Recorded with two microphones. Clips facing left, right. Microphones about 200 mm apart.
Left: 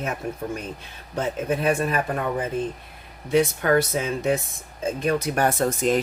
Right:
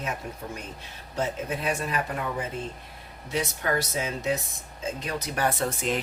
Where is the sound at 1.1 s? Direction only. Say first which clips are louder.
Left 5 dB; 55° left (ahead or behind).